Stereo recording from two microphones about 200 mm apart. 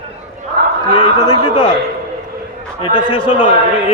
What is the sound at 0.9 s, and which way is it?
Speech, 20° left (ahead or behind).